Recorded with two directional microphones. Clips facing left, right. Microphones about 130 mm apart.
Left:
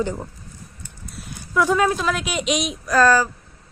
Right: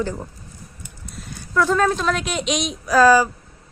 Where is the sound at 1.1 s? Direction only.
5° left (ahead or behind); by 3.2 s 10° right (ahead or behind).